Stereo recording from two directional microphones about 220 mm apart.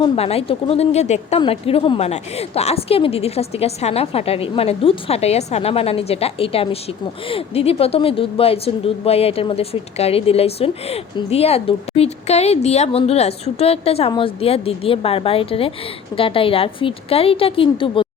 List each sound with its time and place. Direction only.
0.0 s speech: 25° left (ahead or behind)